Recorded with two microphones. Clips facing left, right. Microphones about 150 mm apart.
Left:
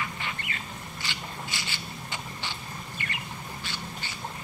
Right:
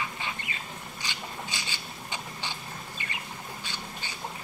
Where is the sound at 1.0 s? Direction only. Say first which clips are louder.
Even; 15° right (ahead or behind).